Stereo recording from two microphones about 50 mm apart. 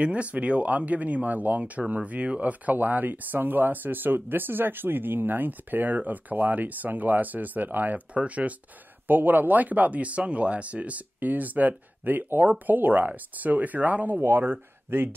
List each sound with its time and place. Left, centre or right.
0.0 s speech: right
8.1 s speech: right
9.0 s speech: right
14.2 s speech: right